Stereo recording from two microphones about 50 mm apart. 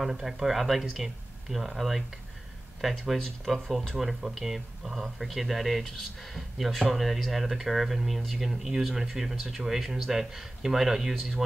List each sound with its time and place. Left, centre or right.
0.0 s speech: centre